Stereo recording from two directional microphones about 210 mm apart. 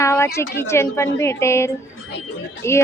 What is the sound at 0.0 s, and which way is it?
A woman's voice, 15° left (ahead or behind).